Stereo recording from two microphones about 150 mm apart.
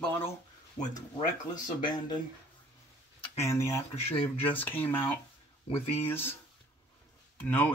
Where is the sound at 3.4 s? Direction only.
20° left (ahead or behind).